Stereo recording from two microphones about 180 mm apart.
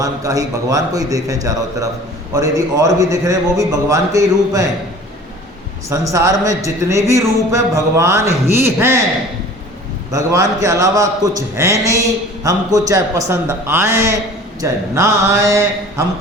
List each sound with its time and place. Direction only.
0.0 s a man's voice: 20° right (ahead or behind)
5.9 s a man's voice: 20° right (ahead or behind)
10.1 s a man's voice: 20° right (ahead or behind)